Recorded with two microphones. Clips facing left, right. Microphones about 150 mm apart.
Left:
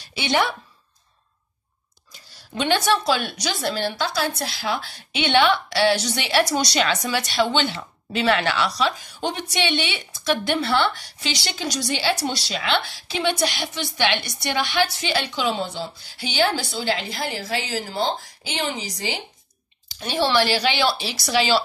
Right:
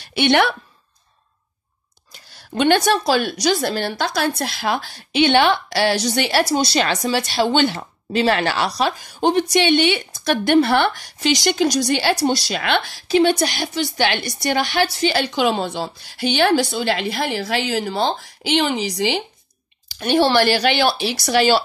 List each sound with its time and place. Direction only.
0.0 s a woman's voice: 65° right (ahead or behind)
2.1 s whispering: 60° right (ahead or behind)
2.8 s speech: 45° right (ahead or behind)
5.3 s speech: 45° right (ahead or behind)
6.5 s a woman's voice: 30° right (ahead or behind)
7.5 s a woman's voice: 45° right (ahead or behind)
15.4 s a woman's voice: 65° right (ahead or behind); by 19.1 s 85° right
20.0 s speech: 60° right (ahead or behind)